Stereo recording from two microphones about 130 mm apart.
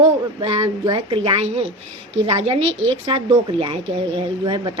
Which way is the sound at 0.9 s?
35° right (ahead or behind).